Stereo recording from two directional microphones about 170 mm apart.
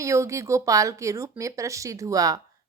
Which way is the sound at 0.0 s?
15° right (ahead or behind).